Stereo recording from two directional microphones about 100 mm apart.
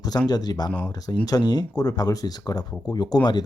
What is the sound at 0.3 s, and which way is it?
Speech, 40° left (ahead or behind).